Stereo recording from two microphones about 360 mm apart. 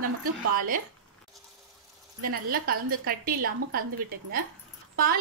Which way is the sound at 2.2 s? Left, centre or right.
Right.